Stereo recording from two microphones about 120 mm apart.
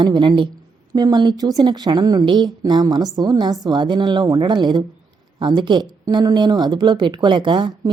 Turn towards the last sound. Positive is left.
turn(degrees=-35)  # may be behind; listen again after turning